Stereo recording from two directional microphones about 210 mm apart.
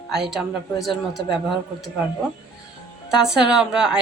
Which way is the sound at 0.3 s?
Centre (ahead or behind).